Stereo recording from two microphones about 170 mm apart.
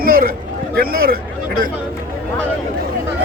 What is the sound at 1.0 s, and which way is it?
Speech, 60° right (ahead or behind).